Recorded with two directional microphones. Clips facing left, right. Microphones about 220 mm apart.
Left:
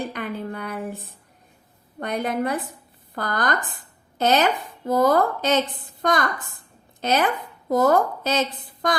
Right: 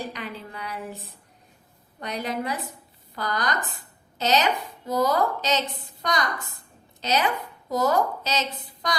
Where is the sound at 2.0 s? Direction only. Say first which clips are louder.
Left 5 dB; 55° left (ahead or behind).